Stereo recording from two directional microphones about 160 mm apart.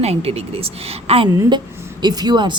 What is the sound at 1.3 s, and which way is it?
A woman's voice, 25° right (ahead or behind).